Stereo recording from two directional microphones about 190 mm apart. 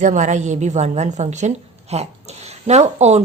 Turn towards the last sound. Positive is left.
turn(degrees=-35)  # may be behind; listen again after turning